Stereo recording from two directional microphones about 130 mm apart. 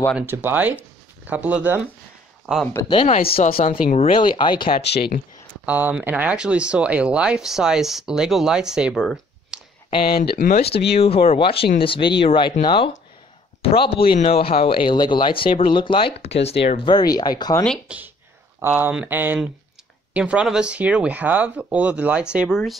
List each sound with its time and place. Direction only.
0.3 s speech: 15° right (ahead or behind)
3.1 s speech: 50° left (ahead or behind)
3.7 s speech: 85° left
4.1 s speech: 40° left (ahead or behind)
5.7 s speech: 15° right (ahead or behind)
9.8 s speech: 40° left (ahead or behind)
10.3 s speech: 80° left
10.6 s speech: 50° left (ahead or behind)
16.2 s speech: 50° left (ahead or behind); by 17.6 s 30° left (ahead or behind)
17.8 s speech: 10° right (ahead or behind)